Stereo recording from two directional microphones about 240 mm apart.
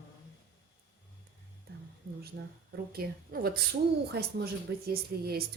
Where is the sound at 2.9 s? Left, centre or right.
Right.